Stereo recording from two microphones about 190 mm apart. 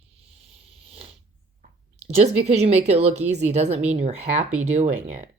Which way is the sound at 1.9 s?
35° right (ahead or behind).